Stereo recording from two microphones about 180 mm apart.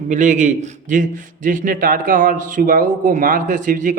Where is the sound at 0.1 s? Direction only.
45° right (ahead or behind).